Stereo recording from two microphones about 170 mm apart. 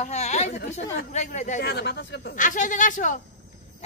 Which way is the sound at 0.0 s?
40° left (ahead or behind).